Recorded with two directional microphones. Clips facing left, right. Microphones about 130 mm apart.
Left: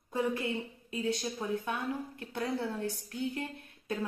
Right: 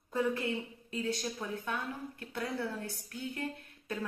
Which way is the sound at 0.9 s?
20° left (ahead or behind).